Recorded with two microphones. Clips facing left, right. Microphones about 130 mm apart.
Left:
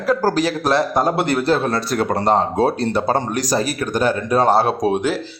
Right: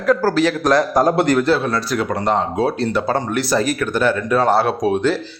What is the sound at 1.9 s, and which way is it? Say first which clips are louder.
Speech: left 3 dB; 40° left (ahead or behind).